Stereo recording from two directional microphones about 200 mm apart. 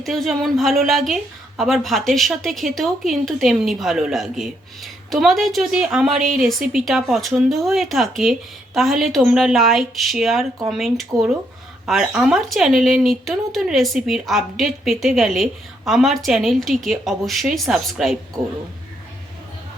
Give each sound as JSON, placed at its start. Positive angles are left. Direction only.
{"t": 0.0, "sound": "a woman's voice", "side_deg": 0}